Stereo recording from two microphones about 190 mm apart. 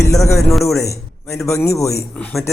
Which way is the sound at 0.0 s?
15° left (ahead or behind).